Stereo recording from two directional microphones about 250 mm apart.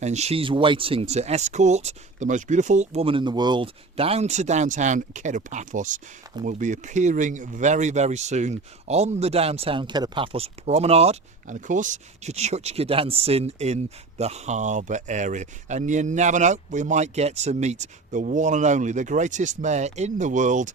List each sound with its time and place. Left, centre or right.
0.0 s speech: right